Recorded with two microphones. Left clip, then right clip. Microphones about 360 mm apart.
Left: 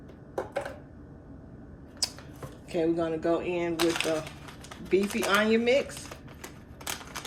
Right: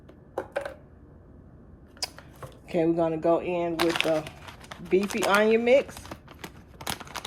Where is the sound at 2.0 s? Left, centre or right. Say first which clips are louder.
Left 2 dB; centre.